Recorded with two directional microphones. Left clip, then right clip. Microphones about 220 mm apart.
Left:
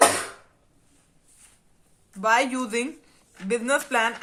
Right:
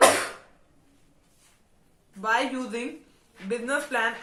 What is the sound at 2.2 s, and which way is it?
A man's voice, 40° left (ahead or behind).